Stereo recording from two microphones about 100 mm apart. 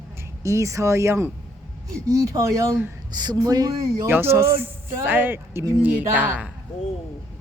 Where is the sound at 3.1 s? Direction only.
45° right (ahead or behind).